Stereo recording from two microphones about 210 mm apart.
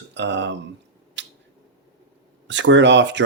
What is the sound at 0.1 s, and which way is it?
Speech, 60° right (ahead or behind).